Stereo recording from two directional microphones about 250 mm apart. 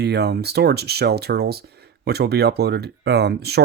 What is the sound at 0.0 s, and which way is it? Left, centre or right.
Speech, right.